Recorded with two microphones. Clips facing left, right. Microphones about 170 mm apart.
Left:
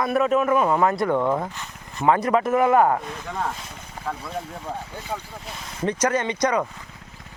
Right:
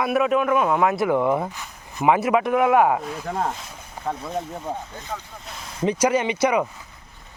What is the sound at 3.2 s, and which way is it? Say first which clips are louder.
Speech: right 4 dB; 30° right (ahead or behind).